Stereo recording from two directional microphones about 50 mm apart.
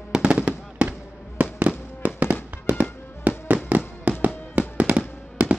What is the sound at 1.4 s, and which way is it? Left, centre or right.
Fireworks, right.